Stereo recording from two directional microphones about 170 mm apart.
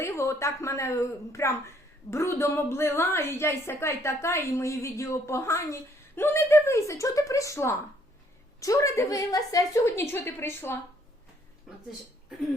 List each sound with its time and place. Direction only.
0.0 s speech: 15° left (ahead or behind)